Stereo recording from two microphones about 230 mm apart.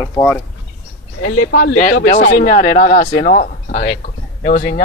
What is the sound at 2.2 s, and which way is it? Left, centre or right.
Speech, left.